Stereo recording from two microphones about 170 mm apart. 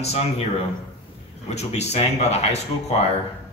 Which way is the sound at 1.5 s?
40° left (ahead or behind).